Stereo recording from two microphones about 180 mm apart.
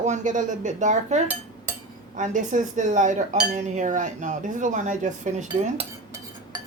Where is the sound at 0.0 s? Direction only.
40° right (ahead or behind).